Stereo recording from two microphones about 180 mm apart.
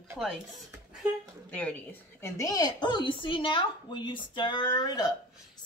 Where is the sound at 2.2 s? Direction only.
20° left (ahead or behind).